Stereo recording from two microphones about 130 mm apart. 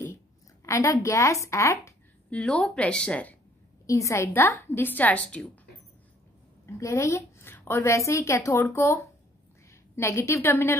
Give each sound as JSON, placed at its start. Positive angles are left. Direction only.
{"t": 0.7, "sound": "a woman's voice", "side_deg": 25}
{"t": 2.3, "sound": "a woman's voice", "side_deg": 5}
{"t": 3.8, "sound": "a woman's voice", "side_deg": 25}
{"t": 6.6, "sound": "a woman's voice", "side_deg": 25}